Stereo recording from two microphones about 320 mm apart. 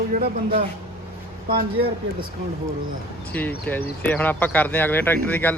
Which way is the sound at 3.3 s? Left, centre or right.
Centre.